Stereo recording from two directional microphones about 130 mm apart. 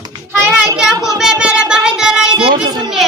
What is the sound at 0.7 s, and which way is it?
Child singing, 5° right (ahead or behind).